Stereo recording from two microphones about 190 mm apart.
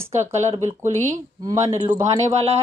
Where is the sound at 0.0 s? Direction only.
35° right (ahead or behind).